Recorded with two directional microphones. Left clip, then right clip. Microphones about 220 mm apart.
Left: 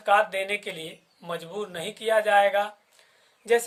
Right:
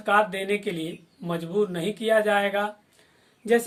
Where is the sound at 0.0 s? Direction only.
20° left (ahead or behind).